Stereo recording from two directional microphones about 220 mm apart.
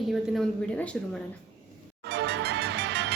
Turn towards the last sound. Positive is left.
turn(degrees=-50)  # may be behind; listen again after turning